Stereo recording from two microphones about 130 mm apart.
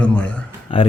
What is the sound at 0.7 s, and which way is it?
Speech, 40° left (ahead or behind).